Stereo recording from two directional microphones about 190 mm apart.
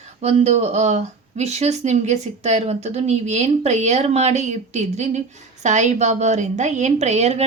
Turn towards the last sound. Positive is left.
turn(degrees=-35)  # may be behind; listen again after turning